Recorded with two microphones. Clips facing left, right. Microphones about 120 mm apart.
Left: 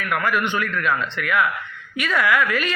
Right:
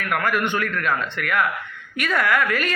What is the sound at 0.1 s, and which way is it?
Speech, 50° right (ahead or behind).